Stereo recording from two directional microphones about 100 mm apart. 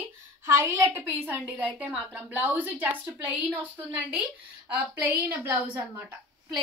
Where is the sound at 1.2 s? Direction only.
15° right (ahead or behind).